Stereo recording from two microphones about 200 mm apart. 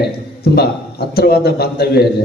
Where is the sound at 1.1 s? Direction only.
50° left (ahead or behind).